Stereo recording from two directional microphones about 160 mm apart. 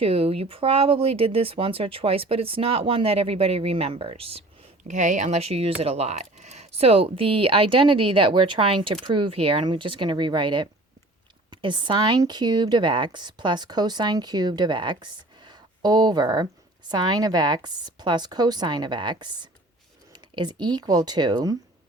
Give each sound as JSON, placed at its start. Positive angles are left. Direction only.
{"t": 0.0, "sound": "speech", "side_deg": -35}
{"t": 4.8, "sound": "speech", "side_deg": -50}